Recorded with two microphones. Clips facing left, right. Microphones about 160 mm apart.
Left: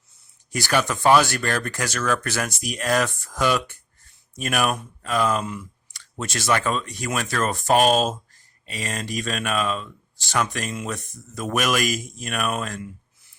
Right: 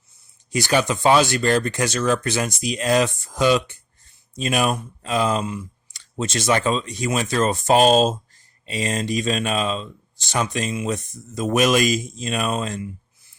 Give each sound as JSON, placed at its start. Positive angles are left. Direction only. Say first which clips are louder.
{"t": 0.5, "sound": "speech", "louder": "right 3 dB", "side_deg": -20}